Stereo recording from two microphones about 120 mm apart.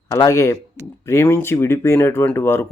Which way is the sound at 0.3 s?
25° left (ahead or behind).